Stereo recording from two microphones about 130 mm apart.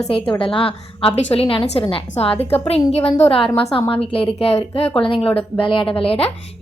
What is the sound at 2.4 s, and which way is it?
Speech, 15° left (ahead or behind).